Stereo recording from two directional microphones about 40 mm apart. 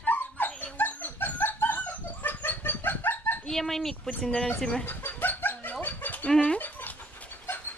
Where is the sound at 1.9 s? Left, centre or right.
Left.